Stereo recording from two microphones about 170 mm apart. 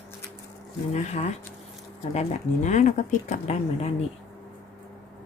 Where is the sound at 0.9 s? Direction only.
40° left (ahead or behind).